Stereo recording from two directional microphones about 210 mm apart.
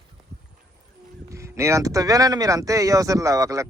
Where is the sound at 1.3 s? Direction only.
15° right (ahead or behind).